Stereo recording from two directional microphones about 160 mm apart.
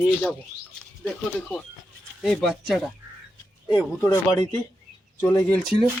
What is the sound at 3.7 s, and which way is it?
Speech, 25° left (ahead or behind).